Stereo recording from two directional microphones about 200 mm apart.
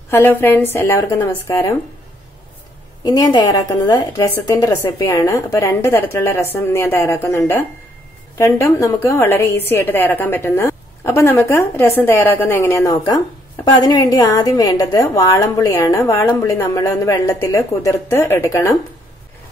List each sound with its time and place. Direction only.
0.1 s a woman's voice: 10° left (ahead or behind)
3.0 s a woman's voice: 20° left (ahead or behind)